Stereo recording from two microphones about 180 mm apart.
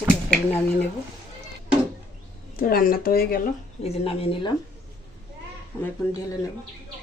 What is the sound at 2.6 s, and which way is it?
Speech, 50° left (ahead or behind).